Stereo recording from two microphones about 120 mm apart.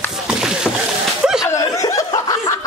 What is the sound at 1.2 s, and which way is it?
Chuckle, 5° right (ahead or behind).